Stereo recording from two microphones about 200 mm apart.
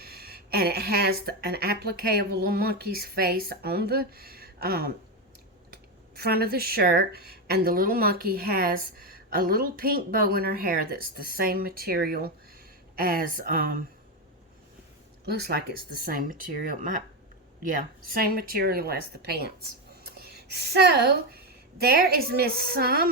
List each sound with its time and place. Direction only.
0.0 s speech: 50° right (ahead or behind)
6.1 s speech: 50° right (ahead or behind)
16.0 s speech: 45° right (ahead or behind)
18.1 s speech: 50° right (ahead or behind)